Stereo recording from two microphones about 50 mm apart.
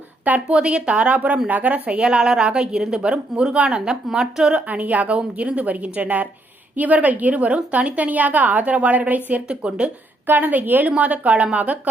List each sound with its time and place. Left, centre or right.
0.4 s a woman's voice: centre; by 1.9 s right
1.9 s a woman's voice: centre
4.6 s a woman's voice: right
10.2 s a woman's voice: right